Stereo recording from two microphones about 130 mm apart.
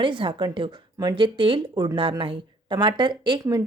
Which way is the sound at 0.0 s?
40° right (ahead or behind).